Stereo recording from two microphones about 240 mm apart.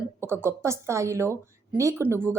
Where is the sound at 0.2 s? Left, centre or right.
Centre.